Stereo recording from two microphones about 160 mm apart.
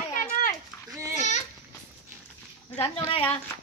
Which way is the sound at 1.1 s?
45° left (ahead or behind).